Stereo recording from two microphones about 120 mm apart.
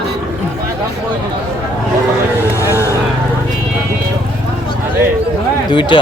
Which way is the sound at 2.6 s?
20° left (ahead or behind).